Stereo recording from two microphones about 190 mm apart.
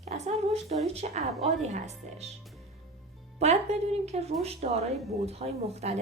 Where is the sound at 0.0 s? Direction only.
35° right (ahead or behind).